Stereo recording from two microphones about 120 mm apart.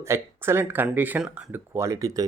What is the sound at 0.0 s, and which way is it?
Speech, 20° right (ahead or behind).